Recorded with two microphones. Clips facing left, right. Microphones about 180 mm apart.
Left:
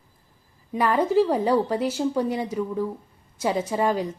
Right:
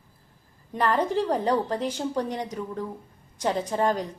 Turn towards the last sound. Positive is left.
turn(degrees=10)  # may be behind; listen again after turning